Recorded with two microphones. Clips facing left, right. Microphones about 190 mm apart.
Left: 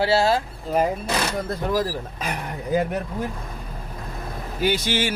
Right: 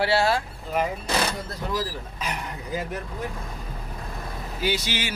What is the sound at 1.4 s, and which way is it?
Speech, 55° left (ahead or behind).